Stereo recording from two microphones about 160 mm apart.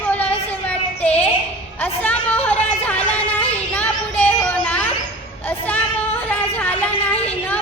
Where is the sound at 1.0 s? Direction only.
10° left (ahead or behind).